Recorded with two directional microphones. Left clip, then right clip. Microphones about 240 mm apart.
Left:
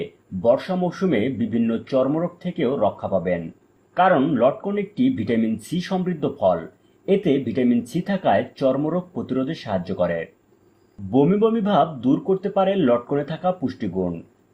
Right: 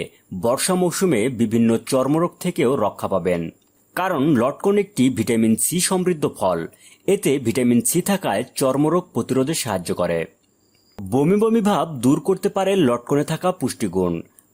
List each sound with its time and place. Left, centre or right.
0.4 s speech: right